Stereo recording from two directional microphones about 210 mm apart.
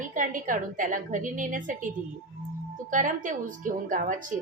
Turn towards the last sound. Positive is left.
turn(degrees=-40)  # may be behind; listen again after turning